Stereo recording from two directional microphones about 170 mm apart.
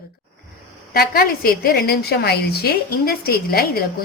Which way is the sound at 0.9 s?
65° left (ahead or behind).